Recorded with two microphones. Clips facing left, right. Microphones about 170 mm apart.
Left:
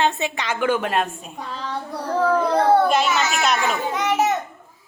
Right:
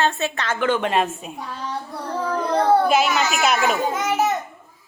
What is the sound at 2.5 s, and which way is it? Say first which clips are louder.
A child's voice: right 3 dB; 5° right (ahead or behind).